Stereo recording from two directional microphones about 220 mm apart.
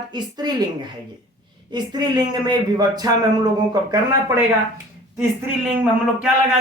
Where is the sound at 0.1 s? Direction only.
20° right (ahead or behind).